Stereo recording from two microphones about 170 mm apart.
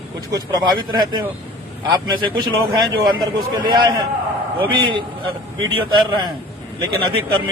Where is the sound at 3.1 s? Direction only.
25° right (ahead or behind).